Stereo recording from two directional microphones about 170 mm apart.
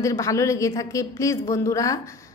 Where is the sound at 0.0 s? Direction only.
20° left (ahead or behind).